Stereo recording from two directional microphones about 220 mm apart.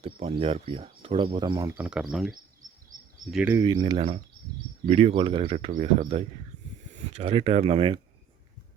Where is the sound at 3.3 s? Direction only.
10° right (ahead or behind).